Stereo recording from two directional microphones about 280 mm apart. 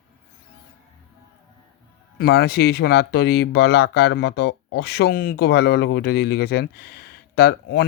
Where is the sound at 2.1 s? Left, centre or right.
Left.